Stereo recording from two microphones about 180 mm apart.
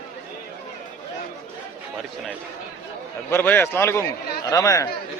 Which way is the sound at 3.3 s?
10° left (ahead or behind).